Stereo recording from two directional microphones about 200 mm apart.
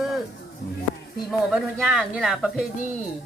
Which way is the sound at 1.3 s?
5° right (ahead or behind).